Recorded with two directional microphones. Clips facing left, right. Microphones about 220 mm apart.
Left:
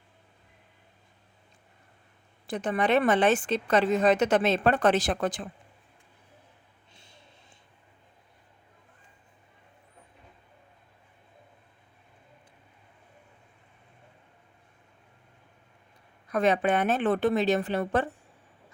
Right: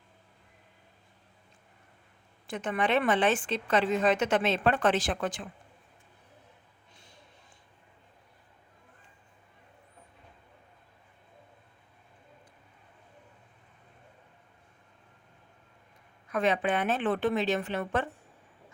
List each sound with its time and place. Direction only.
2.5 s a woman's voice: 35° left (ahead or behind)
16.3 s a woman's voice: 40° left (ahead or behind)